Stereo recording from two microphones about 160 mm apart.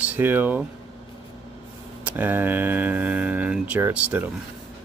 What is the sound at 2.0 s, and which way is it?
Speech, 10° right (ahead or behind).